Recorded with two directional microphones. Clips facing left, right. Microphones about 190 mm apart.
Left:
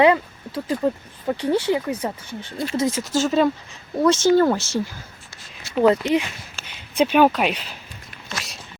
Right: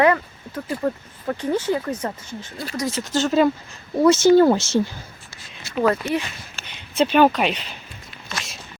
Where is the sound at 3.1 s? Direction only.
Centre (ahead or behind); by 4.8 s 15° right (ahead or behind).